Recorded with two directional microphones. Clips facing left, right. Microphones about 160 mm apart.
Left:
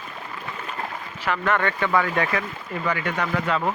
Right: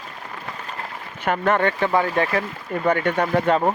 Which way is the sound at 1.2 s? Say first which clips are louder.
Right 4 dB; 50° right (ahead or behind).